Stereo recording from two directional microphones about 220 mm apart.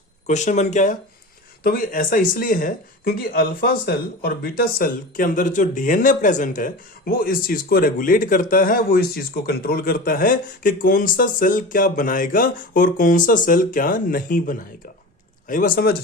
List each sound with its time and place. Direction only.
0.3 s speech: 30° left (ahead or behind)